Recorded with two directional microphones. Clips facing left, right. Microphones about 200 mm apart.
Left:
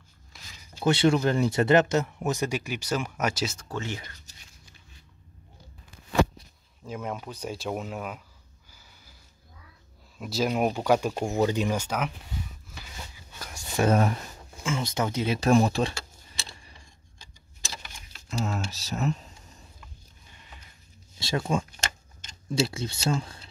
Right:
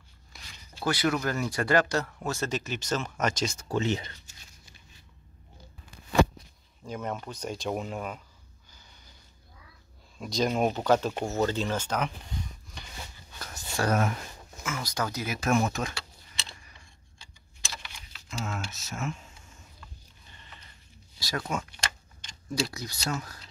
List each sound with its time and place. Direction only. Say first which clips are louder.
0.3 s a sound: even; centre (ahead or behind)
0.7 s speech: left 5 dB; 25° left (ahead or behind); by 3.5 s 5° left (ahead or behind)
3.5 s speech: right 6 dB; 15° right (ahead or behind)
6.8 s speech: even; 5° left (ahead or behind)
10.1 s speech: left 1 dB; 5° left (ahead or behind)
13.8 s speech: left 4 dB; 30° left (ahead or behind)
17.8 s typing: left 2 dB; 45° left (ahead or behind)
19.8 s a sound: even; 10° left (ahead or behind)
21.2 s speech: left 5 dB; 25° left (ahead or behind)
21.6 s a sound: left 1 dB; 40° left (ahead or behind)
22.5 s speech: left 5 dB; 25° left (ahead or behind)